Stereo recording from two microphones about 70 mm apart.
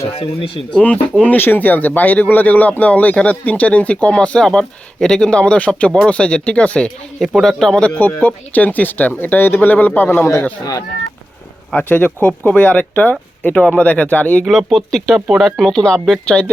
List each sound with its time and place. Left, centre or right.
0.7 s speech: centre
7.2 s speech: centre
7.9 s speech: left
10.6 s speech: left
11.7 s speech: left
14.4 s speech: centre